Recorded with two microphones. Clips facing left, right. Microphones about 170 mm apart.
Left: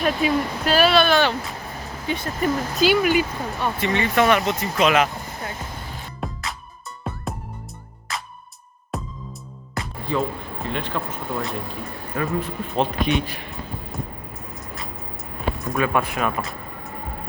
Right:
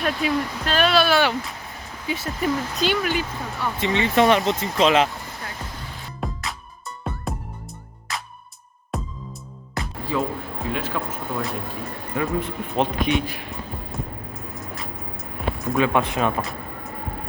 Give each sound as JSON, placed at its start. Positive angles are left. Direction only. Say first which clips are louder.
{"t": 0.0, "sound": "speech", "louder": "left 2 dB", "side_deg": 5}
{"t": 3.8, "sound": "speech", "louder": "right 2 dB", "side_deg": -20}
{"t": 6.1, "sound": "music", "louder": "right 1 dB", "side_deg": 0}
{"t": 9.7, "sound": "speech", "louder": "left 1 dB", "side_deg": 0}
{"t": 12.4, "sound": "speech", "louder": "even", "side_deg": -15}
{"t": 13.1, "sound": "speech", "louder": "even", "side_deg": 0}
{"t": 15.7, "sound": "speech", "louder": "right 2 dB", "side_deg": -20}
{"t": 16.4, "sound": "vehicle", "louder": "right 1 dB", "side_deg": 0}